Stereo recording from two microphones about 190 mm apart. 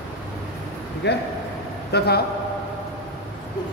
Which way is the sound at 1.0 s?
65° left (ahead or behind).